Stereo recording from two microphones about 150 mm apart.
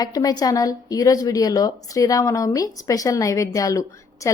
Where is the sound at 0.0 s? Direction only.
25° left (ahead or behind).